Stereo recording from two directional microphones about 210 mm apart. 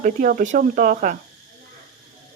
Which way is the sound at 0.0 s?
40° right (ahead or behind).